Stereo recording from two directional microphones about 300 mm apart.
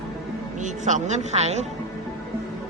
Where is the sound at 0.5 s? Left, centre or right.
Right.